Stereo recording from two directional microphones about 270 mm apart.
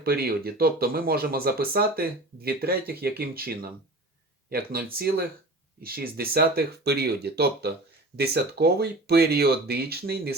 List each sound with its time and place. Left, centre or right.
0.0 s speech: right